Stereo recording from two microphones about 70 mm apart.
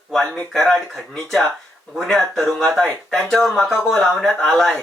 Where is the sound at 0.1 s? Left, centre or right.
Centre.